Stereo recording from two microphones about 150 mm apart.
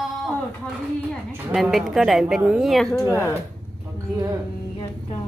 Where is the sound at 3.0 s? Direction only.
20° left (ahead or behind).